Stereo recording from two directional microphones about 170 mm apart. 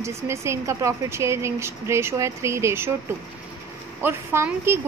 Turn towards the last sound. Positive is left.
turn(degrees=-15)  # may be behind; listen again after turning